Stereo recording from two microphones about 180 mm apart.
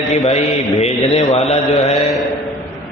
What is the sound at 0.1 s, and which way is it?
Speech, 35° left (ahead or behind).